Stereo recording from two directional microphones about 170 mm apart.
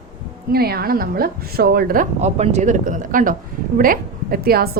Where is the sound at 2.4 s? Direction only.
40° right (ahead or behind).